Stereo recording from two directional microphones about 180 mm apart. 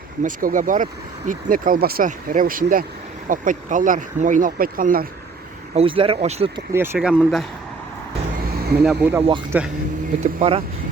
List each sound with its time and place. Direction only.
0.2 s speech: 50° right (ahead or behind)
5.7 s speech: 30° right (ahead or behind)
6.7 s speech: 10° right (ahead or behind)
8.5 s a sound: 60° right (ahead or behind)
8.8 s speech: 5° right (ahead or behind)